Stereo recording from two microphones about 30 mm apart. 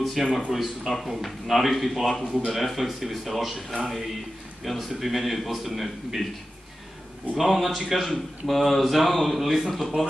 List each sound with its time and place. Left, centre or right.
0.0 s speech: centre
7.3 s speech: centre